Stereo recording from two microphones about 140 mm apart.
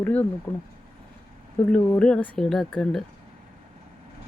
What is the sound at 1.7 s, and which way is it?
Speech, 5° left (ahead or behind).